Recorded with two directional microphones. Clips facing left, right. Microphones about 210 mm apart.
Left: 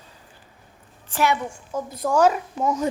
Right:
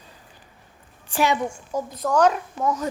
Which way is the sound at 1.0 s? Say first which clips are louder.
Right 1 dB; 15° right (ahead or behind).